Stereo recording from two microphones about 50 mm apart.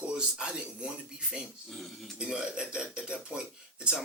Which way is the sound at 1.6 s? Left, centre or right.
Centre.